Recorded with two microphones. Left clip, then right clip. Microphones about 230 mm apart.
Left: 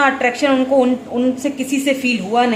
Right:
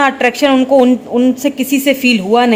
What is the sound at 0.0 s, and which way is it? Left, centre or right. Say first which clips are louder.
A woman's voice: right 4 dB; right.